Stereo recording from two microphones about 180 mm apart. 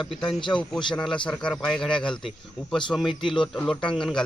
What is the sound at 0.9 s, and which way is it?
Speech, centre (ahead or behind).